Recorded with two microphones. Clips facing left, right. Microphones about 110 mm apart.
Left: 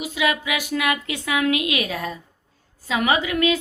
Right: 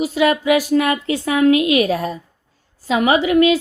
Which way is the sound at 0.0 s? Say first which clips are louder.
Right 7 dB; 40° right (ahead or behind).